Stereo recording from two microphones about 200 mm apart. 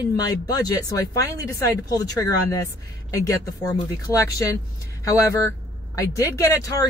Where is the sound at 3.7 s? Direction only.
15° left (ahead or behind).